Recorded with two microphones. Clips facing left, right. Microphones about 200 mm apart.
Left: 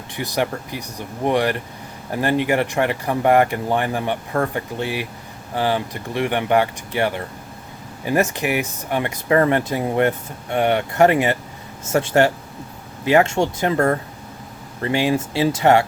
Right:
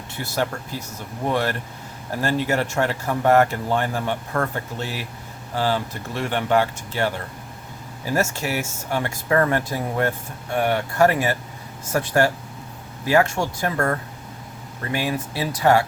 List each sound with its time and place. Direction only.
0.1 s speech: 15° left (ahead or behind)